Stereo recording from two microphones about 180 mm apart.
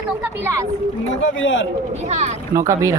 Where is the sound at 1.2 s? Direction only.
90° left.